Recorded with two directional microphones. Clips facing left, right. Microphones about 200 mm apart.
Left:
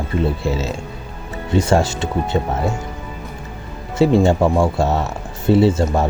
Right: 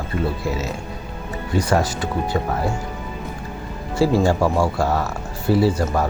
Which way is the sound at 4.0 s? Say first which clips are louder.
Left 3 dB; 25° left (ahead or behind).